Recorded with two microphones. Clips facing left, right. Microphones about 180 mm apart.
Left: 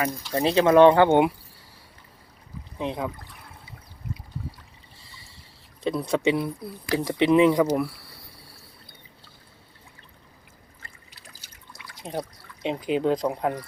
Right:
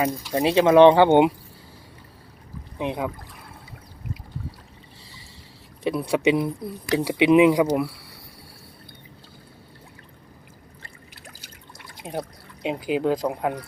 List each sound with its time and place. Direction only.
0.2 s speech: 10° right (ahead or behind)
2.7 s speech: 15° right (ahead or behind)
5.8 s speech: 10° right (ahead or behind)
11.1 s water: 50° right (ahead or behind)
12.0 s speech: 15° right (ahead or behind)
12.6 s speech: 5° right (ahead or behind)